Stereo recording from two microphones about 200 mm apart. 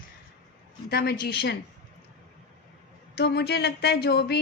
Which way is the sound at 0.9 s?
50° left (ahead or behind).